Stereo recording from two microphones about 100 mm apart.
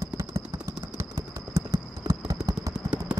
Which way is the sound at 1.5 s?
30° right (ahead or behind).